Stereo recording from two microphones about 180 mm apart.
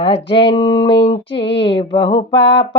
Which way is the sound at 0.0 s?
30° left (ahead or behind).